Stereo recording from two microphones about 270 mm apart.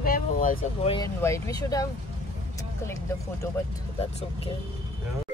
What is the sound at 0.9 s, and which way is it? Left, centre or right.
Speech, centre.